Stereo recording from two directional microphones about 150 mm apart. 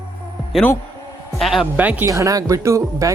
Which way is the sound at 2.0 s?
20° right (ahead or behind).